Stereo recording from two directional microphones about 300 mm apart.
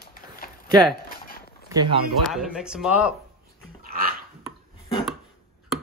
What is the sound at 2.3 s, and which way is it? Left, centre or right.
Speech, centre.